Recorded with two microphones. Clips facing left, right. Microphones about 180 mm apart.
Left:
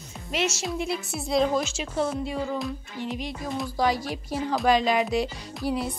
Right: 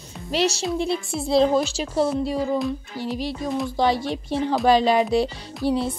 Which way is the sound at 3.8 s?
25° right (ahead or behind).